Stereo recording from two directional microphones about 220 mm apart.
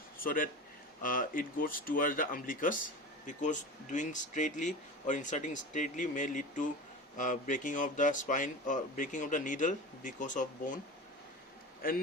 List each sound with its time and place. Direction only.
0.2 s a man's voice: 40° left (ahead or behind)
11.8 s a man's voice: 40° left (ahead or behind)